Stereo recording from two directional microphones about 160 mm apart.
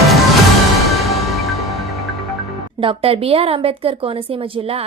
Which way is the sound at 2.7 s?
35° right (ahead or behind).